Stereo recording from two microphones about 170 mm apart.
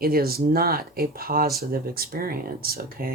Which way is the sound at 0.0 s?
60° right (ahead or behind).